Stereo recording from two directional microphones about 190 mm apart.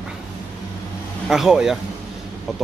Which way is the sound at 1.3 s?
Centre (ahead or behind).